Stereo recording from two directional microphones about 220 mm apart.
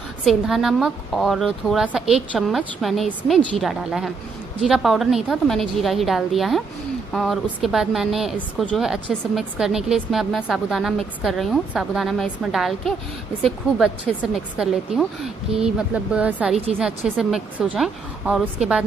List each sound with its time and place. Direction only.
0.2 s speech: centre (ahead or behind)